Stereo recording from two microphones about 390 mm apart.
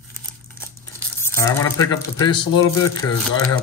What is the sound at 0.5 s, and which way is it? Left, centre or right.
Speech, centre.